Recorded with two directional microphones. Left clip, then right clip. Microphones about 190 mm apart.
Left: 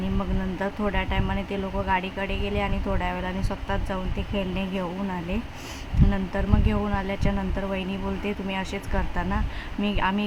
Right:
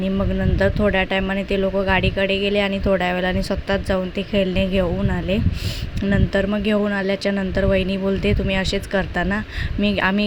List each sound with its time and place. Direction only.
0.6 s speech: 25° right (ahead or behind)
6.1 s speech: 25° right (ahead or behind)